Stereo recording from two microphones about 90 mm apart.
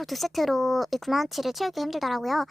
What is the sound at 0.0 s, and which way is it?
A woman's voice, centre (ahead or behind).